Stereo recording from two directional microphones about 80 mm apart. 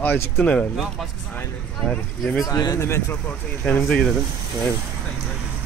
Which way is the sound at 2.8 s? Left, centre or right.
Left.